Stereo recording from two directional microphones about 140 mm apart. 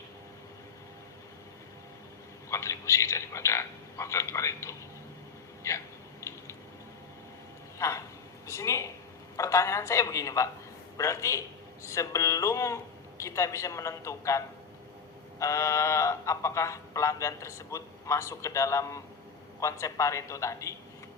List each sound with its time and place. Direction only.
2.5 s speech: 20° left (ahead or behind)
5.6 s a sound: 20° left (ahead or behind)
7.8 s a man's voice: 20° left (ahead or behind)